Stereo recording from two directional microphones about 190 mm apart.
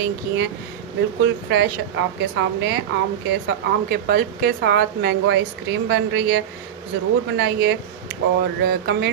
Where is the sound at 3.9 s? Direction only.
55° right (ahead or behind).